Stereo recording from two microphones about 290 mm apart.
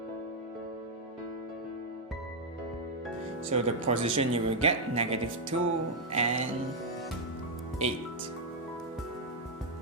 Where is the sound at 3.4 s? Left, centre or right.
Right.